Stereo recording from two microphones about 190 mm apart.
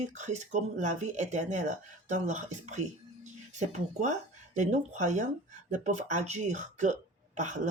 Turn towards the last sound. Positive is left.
turn(degrees=-40)  # may be behind; listen again after turning